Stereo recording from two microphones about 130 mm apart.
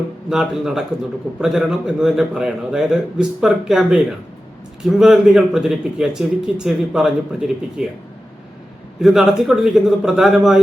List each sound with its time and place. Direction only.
0.3 s speech: 5° right (ahead or behind)
9.0 s speech: centre (ahead or behind)